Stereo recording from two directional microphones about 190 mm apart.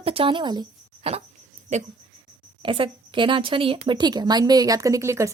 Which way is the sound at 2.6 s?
25° right (ahead or behind).